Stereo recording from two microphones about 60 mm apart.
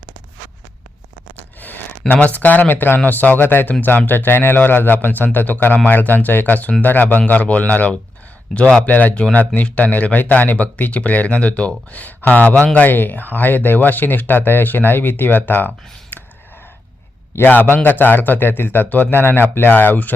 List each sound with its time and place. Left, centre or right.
1.6 s a sound: left
2.1 s speech: left
17.3 s speech: left